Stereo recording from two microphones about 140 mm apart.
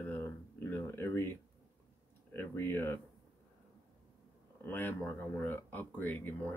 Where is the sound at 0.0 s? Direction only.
15° left (ahead or behind).